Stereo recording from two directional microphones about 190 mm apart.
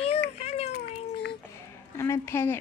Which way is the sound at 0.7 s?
60° left (ahead or behind).